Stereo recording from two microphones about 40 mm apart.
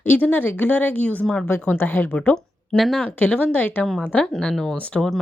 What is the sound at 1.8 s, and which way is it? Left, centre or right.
Speech, left.